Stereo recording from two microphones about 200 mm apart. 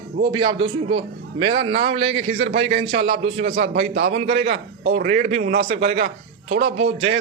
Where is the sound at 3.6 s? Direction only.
55° right (ahead or behind).